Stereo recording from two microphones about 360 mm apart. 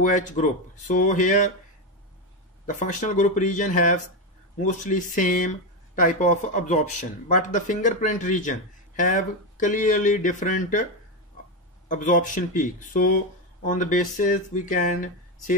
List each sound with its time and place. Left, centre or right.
0.0 s speech: left
2.6 s speech: left
11.9 s speech: left